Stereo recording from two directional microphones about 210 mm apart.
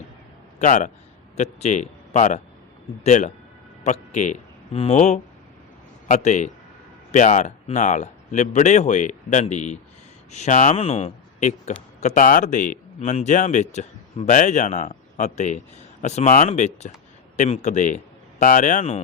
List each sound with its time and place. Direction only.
0.6 s a man's voice: 35° left (ahead or behind)